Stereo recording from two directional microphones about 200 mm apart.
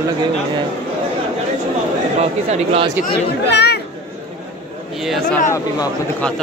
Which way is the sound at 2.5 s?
30° right (ahead or behind).